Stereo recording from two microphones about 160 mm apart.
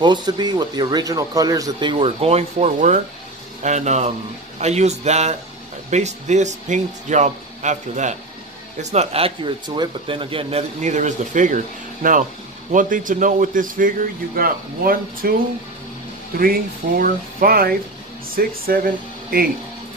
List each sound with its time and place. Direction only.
0.0 s speech: 25° right (ahead or behind)
10.8 s a man's voice: 50° right (ahead or behind); by 15.3 s 65° right (ahead or behind)
17.0 s a man's voice: 65° right (ahead or behind)